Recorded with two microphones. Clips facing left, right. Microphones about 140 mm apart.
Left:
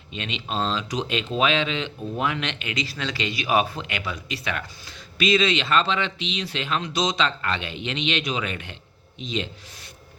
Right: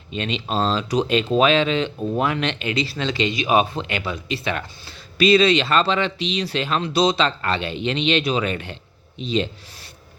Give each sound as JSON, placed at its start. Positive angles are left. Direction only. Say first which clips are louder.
{"t": 0.1, "sound": "speech", "louder": "right 6 dB", "side_deg": -40}